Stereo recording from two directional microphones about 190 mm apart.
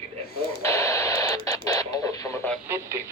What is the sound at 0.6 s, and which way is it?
Radio, 15° left (ahead or behind).